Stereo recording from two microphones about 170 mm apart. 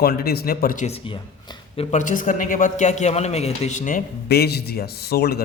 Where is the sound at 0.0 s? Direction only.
65° left (ahead or behind).